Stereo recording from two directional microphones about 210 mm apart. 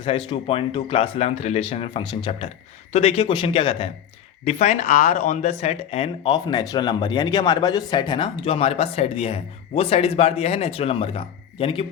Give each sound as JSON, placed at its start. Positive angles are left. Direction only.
{"t": 0.3, "sound": "speech", "side_deg": 25}